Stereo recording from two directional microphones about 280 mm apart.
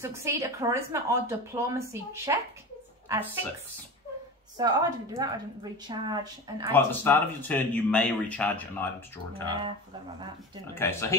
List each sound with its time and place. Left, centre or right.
0.0 s speech: centre
4.6 s speech: centre
6.7 s speech: centre
9.5 s speech: centre
10.7 s speech: centre